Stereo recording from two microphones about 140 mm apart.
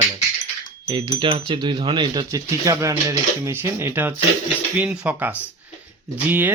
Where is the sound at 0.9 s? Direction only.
35° right (ahead or behind); by 5.3 s 10° right (ahead or behind).